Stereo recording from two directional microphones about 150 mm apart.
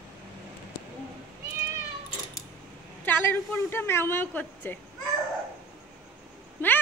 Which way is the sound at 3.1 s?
15° left (ahead or behind).